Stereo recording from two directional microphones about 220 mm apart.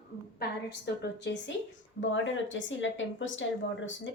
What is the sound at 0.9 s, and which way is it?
Speech, 50° left (ahead or behind).